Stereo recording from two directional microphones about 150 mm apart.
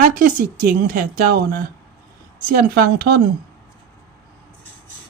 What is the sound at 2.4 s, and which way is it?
Speech, 80° right.